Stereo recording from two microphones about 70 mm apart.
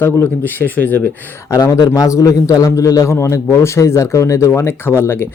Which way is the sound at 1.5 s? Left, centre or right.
Left.